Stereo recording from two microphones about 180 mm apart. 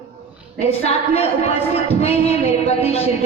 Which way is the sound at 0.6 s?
35° left (ahead or behind).